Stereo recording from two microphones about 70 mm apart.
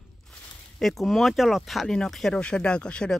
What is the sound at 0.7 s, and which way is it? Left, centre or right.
Speech, centre.